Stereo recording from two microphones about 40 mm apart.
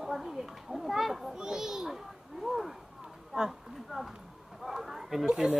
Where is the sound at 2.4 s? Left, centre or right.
Centre.